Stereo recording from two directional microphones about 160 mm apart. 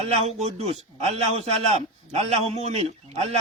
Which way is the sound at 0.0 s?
40° right (ahead or behind).